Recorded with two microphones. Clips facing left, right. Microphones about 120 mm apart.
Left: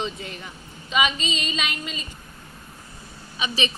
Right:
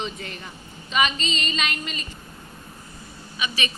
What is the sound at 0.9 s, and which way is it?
Speech, 10° left (ahead or behind).